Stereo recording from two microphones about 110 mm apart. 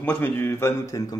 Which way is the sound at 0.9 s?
35° left (ahead or behind).